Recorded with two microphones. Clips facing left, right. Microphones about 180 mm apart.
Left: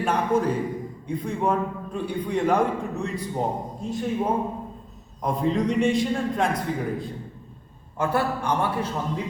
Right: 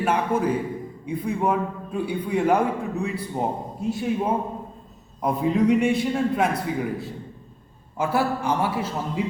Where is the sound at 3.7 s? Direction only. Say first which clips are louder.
Right 3 dB; 5° right (ahead or behind).